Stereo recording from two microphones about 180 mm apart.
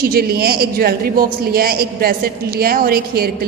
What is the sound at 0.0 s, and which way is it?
A woman's voice, 60° right (ahead or behind).